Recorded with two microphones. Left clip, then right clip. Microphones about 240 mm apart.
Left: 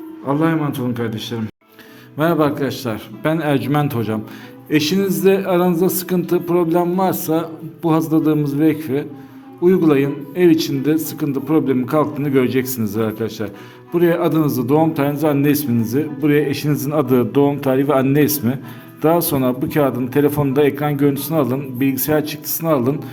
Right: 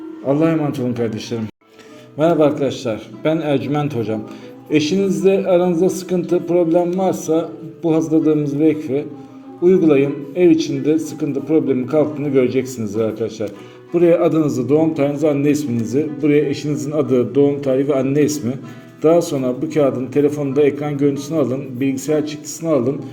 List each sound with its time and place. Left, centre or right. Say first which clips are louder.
0.3 s a man's voice: right 2 dB; centre
2.1 s a man's voice: right 2 dB; left